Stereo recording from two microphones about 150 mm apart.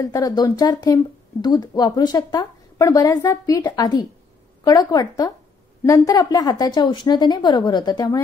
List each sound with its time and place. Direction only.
0.0 s speech: 25° left (ahead or behind)